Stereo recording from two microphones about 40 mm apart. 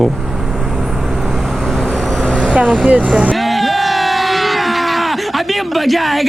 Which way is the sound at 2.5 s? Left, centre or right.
Right.